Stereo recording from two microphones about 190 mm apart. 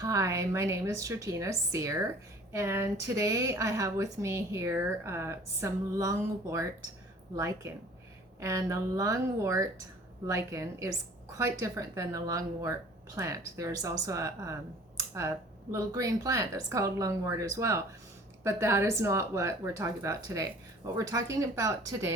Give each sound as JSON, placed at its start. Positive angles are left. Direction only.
{"t": 0.0, "sound": "a woman's voice", "side_deg": -15}